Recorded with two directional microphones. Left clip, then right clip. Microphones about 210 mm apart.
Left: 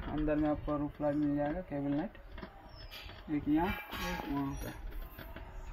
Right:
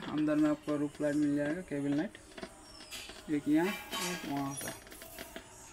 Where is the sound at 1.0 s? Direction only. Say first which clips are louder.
Right 1 dB; centre (ahead or behind).